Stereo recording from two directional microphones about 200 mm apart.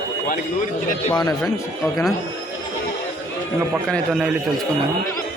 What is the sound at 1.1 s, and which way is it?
Speech, 20° left (ahead or behind).